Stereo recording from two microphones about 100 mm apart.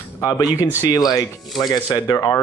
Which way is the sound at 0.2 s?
35° left (ahead or behind).